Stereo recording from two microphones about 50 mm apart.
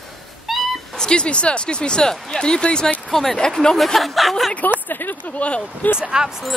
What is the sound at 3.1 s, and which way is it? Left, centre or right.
Speech, centre.